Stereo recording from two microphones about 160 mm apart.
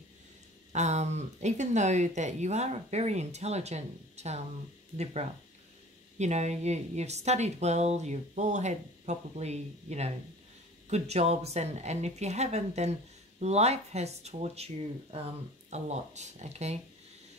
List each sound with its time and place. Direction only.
0.7 s speech: 45° right (ahead or behind)
15.7 s speech: 45° right (ahead or behind)